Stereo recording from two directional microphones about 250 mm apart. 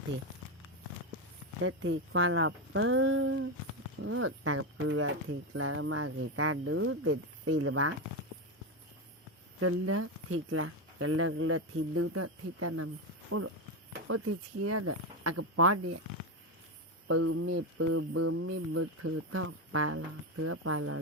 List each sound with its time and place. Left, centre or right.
1.6 s speech: right
4.0 s mantra: right
9.6 s mantra: right
14.1 s speech: right
17.1 s mantra: right